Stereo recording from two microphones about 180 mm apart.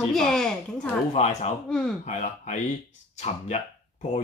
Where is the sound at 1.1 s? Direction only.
35° left (ahead or behind).